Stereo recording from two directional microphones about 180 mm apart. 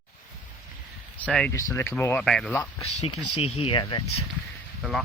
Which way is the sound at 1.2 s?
5° left (ahead or behind).